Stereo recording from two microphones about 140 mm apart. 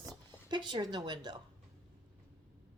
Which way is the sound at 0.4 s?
30° right (ahead or behind).